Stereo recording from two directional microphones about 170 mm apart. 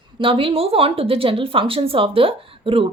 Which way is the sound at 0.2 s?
30° right (ahead or behind).